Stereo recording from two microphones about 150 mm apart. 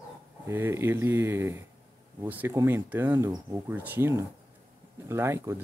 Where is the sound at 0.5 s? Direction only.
15° right (ahead or behind).